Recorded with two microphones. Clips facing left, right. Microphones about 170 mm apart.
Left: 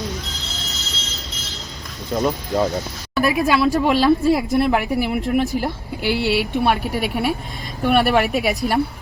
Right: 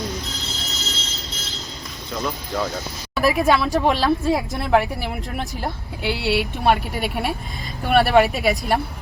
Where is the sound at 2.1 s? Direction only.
40° left (ahead or behind).